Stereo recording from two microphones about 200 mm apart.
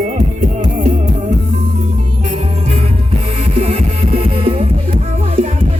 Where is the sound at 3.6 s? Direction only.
30° right (ahead or behind).